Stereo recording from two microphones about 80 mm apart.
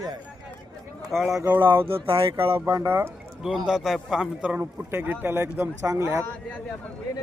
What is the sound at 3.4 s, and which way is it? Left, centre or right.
Speech, centre.